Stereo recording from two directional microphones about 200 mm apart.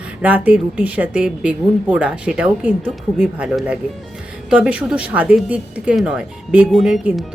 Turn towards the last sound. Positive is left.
turn(degrees=0)  # may be behind; listen again after turning